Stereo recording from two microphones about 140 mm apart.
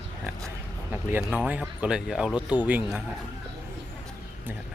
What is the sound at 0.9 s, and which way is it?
Speech, 15° right (ahead or behind).